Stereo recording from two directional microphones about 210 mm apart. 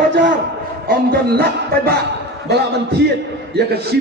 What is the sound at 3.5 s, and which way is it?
Music, 50° right (ahead or behind).